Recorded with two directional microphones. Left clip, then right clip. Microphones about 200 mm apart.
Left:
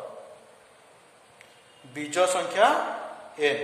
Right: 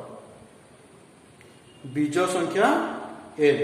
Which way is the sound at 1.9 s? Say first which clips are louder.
Even; 35° left (ahead or behind).